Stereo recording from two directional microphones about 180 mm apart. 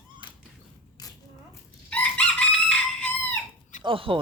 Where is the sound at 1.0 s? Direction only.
20° left (ahead or behind).